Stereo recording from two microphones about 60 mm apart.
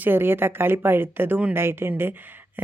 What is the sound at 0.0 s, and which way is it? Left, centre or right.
Speech, right.